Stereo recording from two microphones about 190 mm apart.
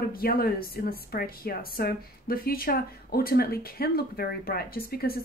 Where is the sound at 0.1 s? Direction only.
50° left (ahead or behind).